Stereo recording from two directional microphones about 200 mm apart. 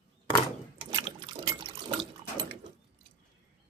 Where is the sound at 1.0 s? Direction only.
25° right (ahead or behind).